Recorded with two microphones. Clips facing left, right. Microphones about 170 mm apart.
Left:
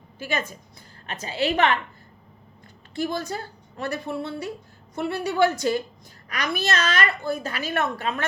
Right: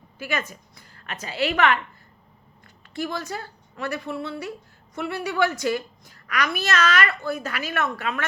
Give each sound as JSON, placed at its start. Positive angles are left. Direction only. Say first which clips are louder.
{"t": 0.2, "sound": "a woman's voice", "louder": "left 1 dB", "side_deg": 30}
{"t": 2.9, "sound": "a child's voice", "louder": "left 2 dB", "side_deg": 35}